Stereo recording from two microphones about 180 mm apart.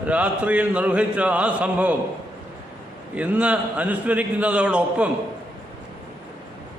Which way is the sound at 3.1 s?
10° right (ahead or behind).